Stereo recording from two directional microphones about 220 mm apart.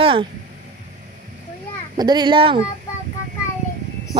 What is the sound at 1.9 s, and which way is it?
Speech, 20° right (ahead or behind).